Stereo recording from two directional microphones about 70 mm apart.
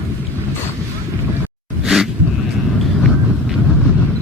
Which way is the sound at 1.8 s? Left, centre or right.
Centre.